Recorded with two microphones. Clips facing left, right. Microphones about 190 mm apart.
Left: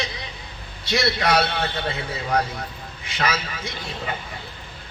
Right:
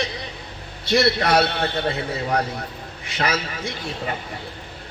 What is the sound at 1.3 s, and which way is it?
A man's voice, 30° right (ahead or behind).